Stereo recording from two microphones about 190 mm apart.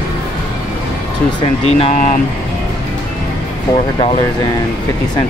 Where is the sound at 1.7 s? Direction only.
35° left (ahead or behind).